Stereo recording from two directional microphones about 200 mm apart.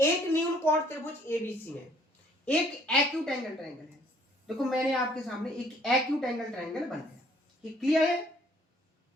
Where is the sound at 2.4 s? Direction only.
5° left (ahead or behind).